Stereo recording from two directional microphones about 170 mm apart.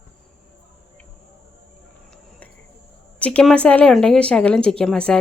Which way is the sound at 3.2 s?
5° left (ahead or behind).